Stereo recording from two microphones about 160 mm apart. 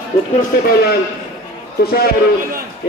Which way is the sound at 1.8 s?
75° left (ahead or behind).